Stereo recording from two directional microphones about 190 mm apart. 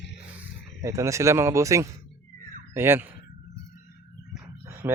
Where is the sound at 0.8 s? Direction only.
15° right (ahead or behind).